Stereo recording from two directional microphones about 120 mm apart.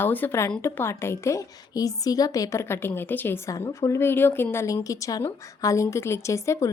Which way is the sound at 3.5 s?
25° left (ahead or behind).